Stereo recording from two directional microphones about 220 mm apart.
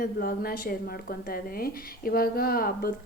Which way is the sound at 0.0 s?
45° left (ahead or behind).